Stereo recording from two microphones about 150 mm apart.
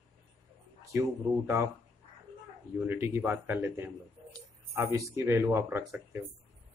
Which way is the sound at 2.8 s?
15° right (ahead or behind).